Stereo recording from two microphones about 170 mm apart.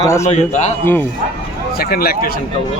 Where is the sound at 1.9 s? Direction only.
60° left (ahead or behind).